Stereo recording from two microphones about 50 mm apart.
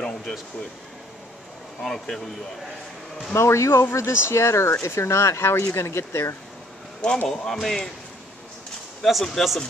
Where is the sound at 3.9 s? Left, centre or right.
Left.